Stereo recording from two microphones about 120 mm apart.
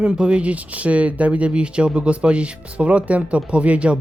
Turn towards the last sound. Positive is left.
turn(degrees=-10)  # may be behind; listen again after turning